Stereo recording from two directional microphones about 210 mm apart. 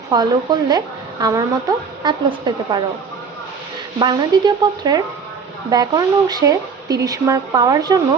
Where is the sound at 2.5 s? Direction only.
20° right (ahead or behind).